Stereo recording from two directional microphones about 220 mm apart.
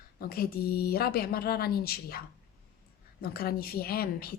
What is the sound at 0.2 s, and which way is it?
A woman's voice, 40° left (ahead or behind).